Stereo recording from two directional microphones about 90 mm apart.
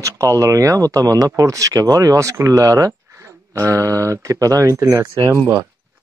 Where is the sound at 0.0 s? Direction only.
35° right (ahead or behind).